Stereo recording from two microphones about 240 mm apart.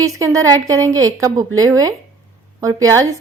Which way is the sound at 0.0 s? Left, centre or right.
Centre.